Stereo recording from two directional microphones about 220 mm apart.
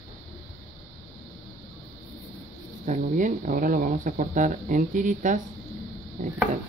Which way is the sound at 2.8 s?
35° right (ahead or behind).